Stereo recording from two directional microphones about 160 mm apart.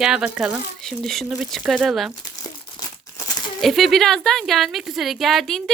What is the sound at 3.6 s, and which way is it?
Speech, centre (ahead or behind).